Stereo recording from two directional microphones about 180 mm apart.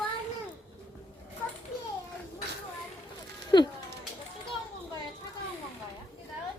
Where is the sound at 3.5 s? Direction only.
25° left (ahead or behind).